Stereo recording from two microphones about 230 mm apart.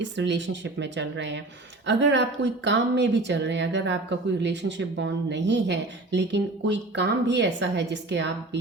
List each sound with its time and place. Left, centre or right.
0.0 s speech: right